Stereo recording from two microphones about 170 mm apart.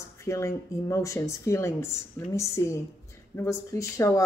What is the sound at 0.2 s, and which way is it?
A woman's voice, 20° left (ahead or behind).